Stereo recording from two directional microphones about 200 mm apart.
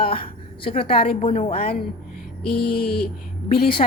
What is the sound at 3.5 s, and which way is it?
Speech, 45° left (ahead or behind).